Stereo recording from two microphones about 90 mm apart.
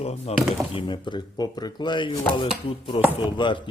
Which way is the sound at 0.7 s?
60° left (ahead or behind).